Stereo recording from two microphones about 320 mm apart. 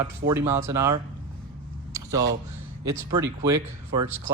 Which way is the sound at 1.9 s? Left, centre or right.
Centre.